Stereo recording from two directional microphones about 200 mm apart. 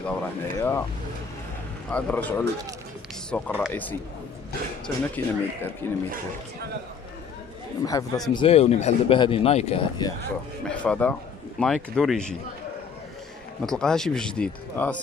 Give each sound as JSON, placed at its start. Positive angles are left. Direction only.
{"t": 0.0, "sound": "speech", "side_deg": 10}
{"t": 1.9, "sound": "speech", "side_deg": 5}
{"t": 7.8, "sound": "a man's voice", "side_deg": 15}
{"t": 10.7, "sound": "speech", "side_deg": 5}
{"t": 13.7, "sound": "speech", "side_deg": 5}